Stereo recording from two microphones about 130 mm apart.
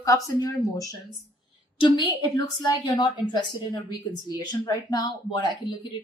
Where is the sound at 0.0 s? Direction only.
25° left (ahead or behind).